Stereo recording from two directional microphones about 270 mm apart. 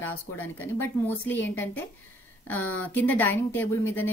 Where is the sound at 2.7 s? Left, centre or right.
Centre.